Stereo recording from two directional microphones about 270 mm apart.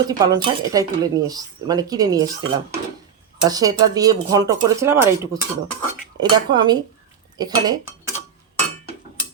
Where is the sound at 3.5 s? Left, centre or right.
Centre.